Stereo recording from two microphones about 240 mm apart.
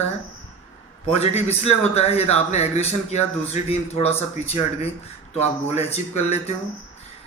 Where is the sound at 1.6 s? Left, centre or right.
Left.